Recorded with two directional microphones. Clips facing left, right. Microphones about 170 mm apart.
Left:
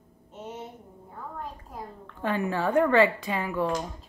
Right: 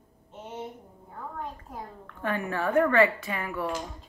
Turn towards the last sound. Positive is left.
turn(degrees=20)  # may be behind; listen again after turning